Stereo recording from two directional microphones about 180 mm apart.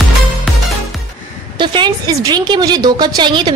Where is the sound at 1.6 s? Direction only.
25° right (ahead or behind).